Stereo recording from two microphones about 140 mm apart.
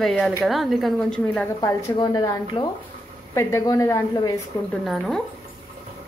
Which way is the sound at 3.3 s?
20° left (ahead or behind).